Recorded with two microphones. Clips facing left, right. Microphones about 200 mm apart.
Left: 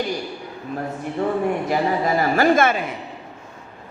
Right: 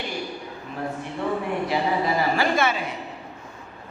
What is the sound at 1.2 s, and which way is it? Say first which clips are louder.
A man's voice: left 5 dB; 45° left (ahead or behind).